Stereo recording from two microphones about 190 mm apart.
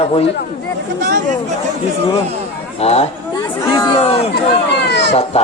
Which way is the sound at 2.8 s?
35° left (ahead or behind).